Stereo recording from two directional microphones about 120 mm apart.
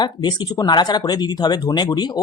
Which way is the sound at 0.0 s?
40° left (ahead or behind).